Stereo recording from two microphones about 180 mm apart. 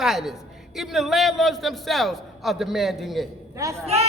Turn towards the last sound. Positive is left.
turn(degrees=-35)  # may be behind; listen again after turning